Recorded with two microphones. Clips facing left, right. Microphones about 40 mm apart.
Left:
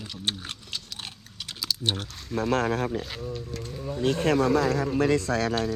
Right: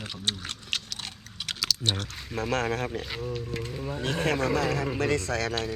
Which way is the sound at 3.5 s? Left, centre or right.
Right.